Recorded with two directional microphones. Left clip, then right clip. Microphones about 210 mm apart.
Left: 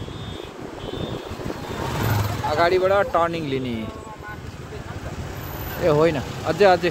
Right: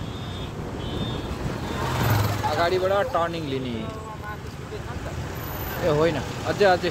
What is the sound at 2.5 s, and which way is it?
Speech, 35° left (ahead or behind).